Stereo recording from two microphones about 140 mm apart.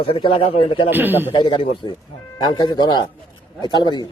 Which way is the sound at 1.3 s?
35° left (ahead or behind).